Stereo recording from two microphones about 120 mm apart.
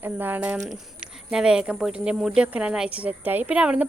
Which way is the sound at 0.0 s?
15° right (ahead or behind).